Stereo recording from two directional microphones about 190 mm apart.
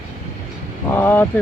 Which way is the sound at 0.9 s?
10° left (ahead or behind).